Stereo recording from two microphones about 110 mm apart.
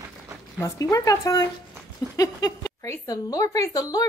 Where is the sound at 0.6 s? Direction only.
30° left (ahead or behind).